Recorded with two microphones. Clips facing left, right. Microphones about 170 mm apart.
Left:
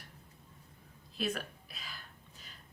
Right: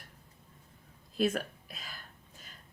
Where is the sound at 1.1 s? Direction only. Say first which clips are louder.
Right 6 dB; 45° right (ahead or behind).